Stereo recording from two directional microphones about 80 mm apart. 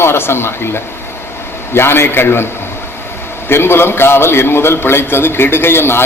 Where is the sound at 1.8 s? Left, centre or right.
Left.